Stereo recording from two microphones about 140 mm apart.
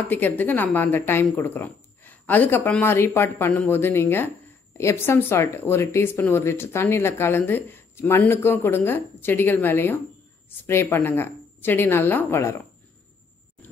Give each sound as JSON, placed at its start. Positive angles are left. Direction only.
{"t": 0.1, "sound": "speech", "side_deg": 15}